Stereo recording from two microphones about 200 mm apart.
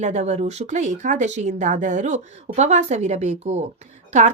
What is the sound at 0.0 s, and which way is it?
A woman's voice, 35° right (ahead or behind).